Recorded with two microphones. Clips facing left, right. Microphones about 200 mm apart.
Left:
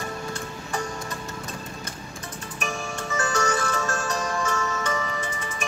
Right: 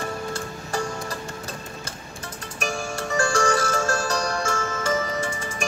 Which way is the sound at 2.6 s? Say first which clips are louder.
Right 3 dB; 35° right (ahead or behind).